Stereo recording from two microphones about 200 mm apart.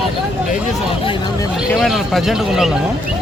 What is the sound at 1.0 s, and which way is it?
Speech, 20° left (ahead or behind).